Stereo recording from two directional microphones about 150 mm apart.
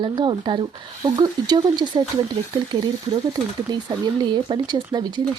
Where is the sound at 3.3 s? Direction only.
30° right (ahead or behind).